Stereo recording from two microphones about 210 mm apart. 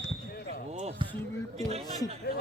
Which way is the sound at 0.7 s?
30° right (ahead or behind).